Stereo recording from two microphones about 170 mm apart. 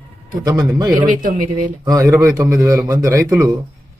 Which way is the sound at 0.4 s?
15° right (ahead or behind).